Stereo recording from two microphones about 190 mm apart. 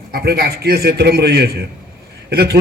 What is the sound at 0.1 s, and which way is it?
A man's voice, 55° right (ahead or behind).